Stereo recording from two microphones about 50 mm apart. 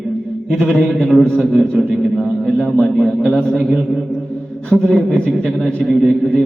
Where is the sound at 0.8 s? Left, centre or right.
Centre.